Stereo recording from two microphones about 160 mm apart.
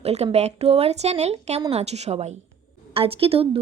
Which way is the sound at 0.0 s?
40° right (ahead or behind).